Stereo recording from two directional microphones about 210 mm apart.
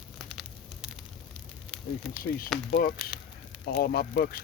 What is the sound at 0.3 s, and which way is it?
Fire, centre (ahead or behind).